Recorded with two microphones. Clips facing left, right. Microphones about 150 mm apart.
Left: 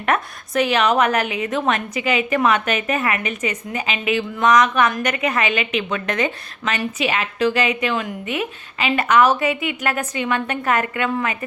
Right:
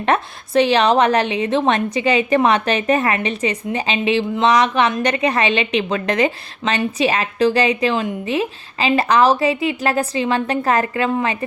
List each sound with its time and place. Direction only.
0.0 s a woman's voice: 30° right (ahead or behind)